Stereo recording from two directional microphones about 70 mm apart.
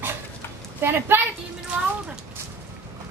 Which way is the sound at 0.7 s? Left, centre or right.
Right.